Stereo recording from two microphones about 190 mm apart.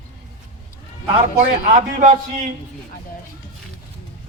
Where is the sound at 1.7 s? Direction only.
40° right (ahead or behind).